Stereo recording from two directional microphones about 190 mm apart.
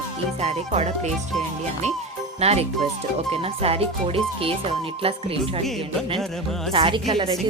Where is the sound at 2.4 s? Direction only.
35° right (ahead or behind).